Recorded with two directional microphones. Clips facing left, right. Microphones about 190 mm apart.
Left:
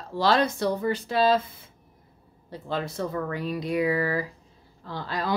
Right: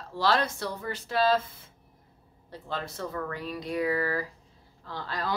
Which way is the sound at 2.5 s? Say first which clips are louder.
Left 5 dB; 15° left (ahead or behind).